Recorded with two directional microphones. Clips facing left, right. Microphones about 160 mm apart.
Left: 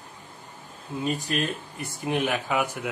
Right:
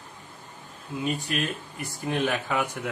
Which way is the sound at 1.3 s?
35° left (ahead or behind).